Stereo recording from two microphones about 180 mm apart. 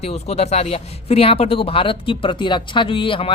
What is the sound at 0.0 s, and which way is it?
Speech, 35° left (ahead or behind).